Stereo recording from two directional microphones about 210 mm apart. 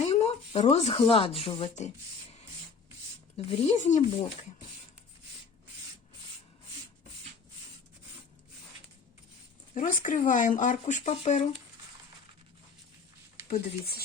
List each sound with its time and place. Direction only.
0.1 s speech: 30° left (ahead or behind)
3.3 s speech: 35° left (ahead or behind)
9.7 s speech: 40° left (ahead or behind)
13.5 s speech: 45° left (ahead or behind)